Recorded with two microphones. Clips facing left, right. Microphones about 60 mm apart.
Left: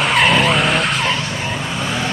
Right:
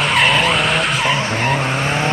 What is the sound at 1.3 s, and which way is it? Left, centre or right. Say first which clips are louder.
Vehicle: right 5 dB; right.